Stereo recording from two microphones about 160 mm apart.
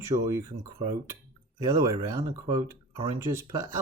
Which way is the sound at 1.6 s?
20° right (ahead or behind).